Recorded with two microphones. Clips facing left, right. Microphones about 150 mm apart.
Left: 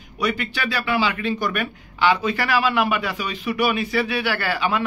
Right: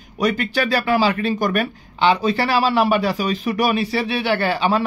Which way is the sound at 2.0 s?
30° right (ahead or behind).